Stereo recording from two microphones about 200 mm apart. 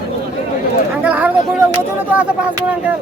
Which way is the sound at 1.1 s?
5° right (ahead or behind).